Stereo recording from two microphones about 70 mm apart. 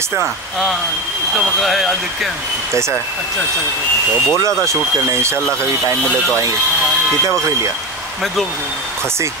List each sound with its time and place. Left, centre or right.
1.6 s speech: centre
4.4 s speech: right